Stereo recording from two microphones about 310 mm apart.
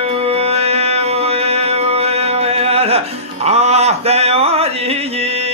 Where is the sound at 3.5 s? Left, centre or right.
Centre.